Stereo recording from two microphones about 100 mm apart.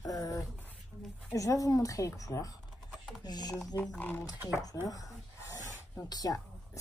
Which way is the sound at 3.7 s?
15° left (ahead or behind).